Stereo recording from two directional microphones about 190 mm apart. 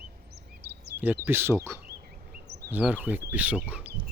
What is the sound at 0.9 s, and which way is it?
Speech, 10° right (ahead or behind).